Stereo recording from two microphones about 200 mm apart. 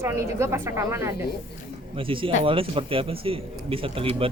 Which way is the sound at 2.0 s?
25° right (ahead or behind).